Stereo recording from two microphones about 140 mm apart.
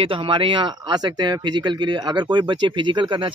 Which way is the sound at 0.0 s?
40° right (ahead or behind).